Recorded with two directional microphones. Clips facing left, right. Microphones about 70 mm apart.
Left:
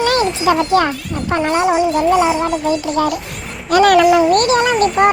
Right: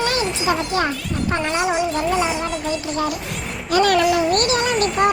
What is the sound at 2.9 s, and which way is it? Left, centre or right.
Speech, left.